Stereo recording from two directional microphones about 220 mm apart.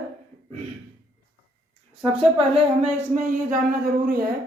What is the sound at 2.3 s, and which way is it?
A woman's voice, 25° right (ahead or behind).